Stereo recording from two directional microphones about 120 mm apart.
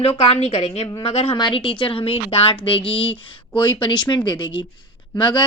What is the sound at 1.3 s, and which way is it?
A woman's voice, 40° left (ahead or behind).